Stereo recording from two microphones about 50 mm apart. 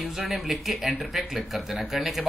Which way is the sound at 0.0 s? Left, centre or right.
Centre.